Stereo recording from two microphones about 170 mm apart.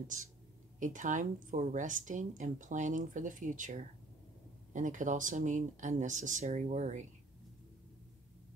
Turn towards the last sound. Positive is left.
turn(degrees=-45)  # may be behind; listen again after turning